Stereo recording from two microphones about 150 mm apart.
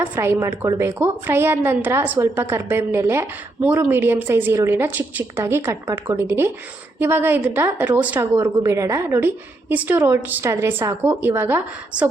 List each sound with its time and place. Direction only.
0.0 s a woman's voice: 15° right (ahead or behind)